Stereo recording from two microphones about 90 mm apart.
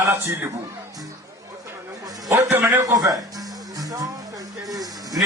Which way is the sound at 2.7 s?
35° right (ahead or behind).